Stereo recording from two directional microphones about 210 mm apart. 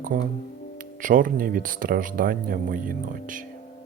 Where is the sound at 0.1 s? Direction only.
40° right (ahead or behind).